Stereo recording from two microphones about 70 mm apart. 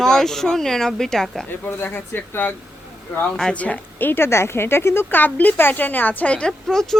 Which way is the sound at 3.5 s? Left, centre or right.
Left.